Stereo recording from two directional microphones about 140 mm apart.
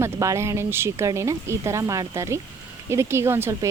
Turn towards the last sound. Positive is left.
turn(degrees=-15)  # may be behind; listen again after turning